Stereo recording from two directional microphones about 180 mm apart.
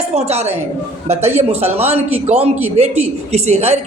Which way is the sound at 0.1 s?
35° right (ahead or behind).